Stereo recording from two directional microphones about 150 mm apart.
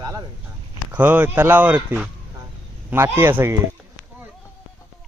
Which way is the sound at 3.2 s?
15° right (ahead or behind).